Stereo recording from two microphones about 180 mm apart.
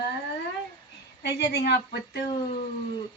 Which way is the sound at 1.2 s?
70° left (ahead or behind).